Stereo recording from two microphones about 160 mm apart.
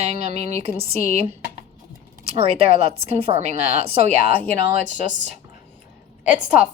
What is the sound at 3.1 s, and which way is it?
Speech, 40° right (ahead or behind).